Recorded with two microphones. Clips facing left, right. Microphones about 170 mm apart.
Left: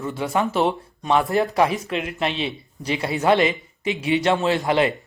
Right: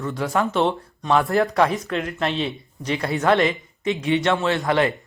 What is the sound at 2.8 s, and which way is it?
Speech, 25° left (ahead or behind).